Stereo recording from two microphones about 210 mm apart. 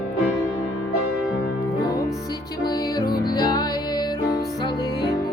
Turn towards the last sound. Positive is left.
turn(degrees=20)  # may be behind; listen again after turning